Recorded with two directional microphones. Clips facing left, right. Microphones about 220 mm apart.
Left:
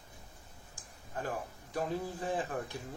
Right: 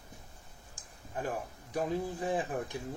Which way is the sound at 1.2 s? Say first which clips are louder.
Right 2 dB; 15° right (ahead or behind).